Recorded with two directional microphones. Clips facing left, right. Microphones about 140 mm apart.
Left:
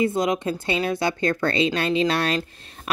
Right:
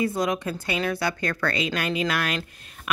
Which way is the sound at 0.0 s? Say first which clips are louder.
Left 3 dB; 20° left (ahead or behind).